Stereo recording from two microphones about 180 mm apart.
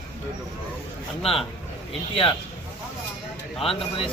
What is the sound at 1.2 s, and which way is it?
A man's voice, 30° left (ahead or behind).